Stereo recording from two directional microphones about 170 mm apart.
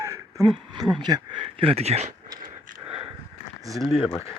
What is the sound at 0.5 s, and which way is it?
Speech, 25° right (ahead or behind).